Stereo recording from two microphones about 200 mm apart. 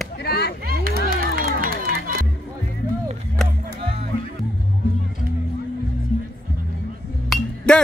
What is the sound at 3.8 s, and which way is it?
Music, 30° right (ahead or behind).